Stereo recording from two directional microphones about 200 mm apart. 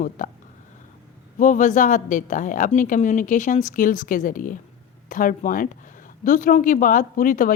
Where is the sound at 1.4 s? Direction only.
40° left (ahead or behind).